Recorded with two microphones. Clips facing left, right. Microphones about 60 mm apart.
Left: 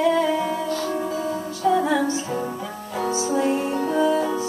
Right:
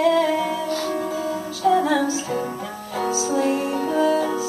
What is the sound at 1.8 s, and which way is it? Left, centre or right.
Music, left.